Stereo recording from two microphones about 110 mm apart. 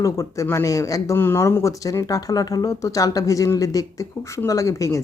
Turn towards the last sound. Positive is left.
turn(degrees=30)  # may be behind; listen again after turning